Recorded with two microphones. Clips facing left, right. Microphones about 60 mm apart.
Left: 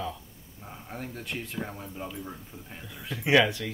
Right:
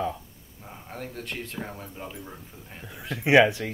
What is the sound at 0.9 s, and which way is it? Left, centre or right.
Speech, centre.